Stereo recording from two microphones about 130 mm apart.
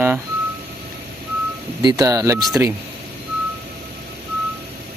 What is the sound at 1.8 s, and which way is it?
Speech, 30° right (ahead or behind).